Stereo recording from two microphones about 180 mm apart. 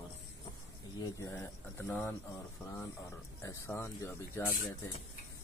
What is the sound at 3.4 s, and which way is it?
Speech, 15° left (ahead or behind).